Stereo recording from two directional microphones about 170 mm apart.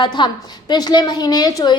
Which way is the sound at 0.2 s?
30° left (ahead or behind).